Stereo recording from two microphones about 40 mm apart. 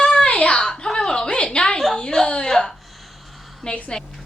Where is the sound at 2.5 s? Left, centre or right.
Centre.